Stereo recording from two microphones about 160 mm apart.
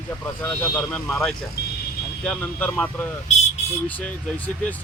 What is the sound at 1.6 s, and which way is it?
Vehicle, 90° left.